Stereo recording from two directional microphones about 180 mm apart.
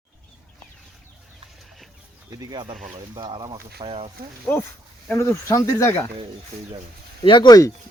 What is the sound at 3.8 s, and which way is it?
Speech, 30° right (ahead or behind).